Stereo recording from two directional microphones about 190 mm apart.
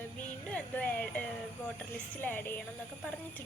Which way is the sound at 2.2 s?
10° left (ahead or behind).